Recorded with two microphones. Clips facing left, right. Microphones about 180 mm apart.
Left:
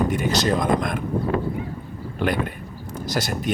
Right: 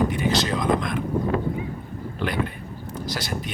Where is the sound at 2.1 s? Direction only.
50° left (ahead or behind).